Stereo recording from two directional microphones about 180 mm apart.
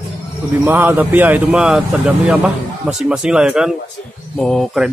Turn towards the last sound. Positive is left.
turn(degrees=0)  # may be behind; listen again after turning